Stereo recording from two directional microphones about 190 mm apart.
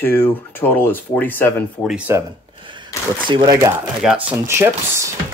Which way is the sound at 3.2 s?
25° right (ahead or behind).